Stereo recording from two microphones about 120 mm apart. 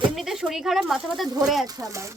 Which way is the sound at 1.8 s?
25° right (ahead or behind).